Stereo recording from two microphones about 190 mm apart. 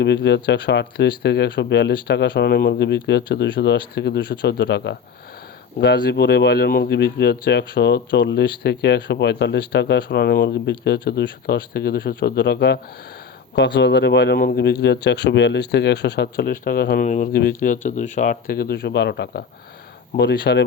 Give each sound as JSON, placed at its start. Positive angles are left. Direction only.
{"t": 0.0, "sound": "speech", "side_deg": 60}